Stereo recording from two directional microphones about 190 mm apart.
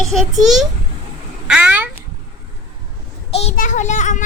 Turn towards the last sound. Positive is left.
turn(degrees=40)  # may be behind; listen again after turning